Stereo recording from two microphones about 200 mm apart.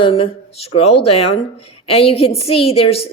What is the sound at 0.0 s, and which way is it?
A woman's voice, 30° left (ahead or behind).